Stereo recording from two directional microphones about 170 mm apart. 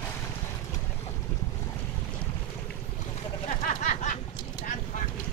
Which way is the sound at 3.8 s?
45° left (ahead or behind).